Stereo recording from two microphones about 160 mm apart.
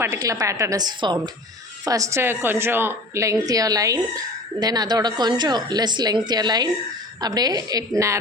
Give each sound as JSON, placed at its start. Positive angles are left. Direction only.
{"t": 0.0, "sound": "a woman's voice", "side_deg": -20}